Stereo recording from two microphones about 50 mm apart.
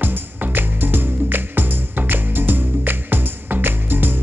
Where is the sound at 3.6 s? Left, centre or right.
Right.